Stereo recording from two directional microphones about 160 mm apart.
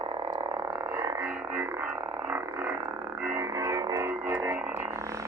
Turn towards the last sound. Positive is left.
turn(degrees=-10)  # may be behind; listen again after turning